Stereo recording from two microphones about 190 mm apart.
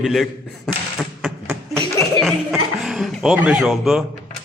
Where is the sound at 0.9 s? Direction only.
5° right (ahead or behind).